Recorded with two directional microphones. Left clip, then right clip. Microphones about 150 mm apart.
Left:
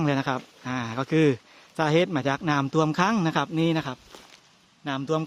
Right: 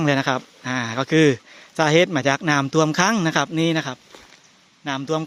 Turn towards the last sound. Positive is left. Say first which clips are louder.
# right 3 dB
turn(degrees=0)  # may be behind; listen again after turning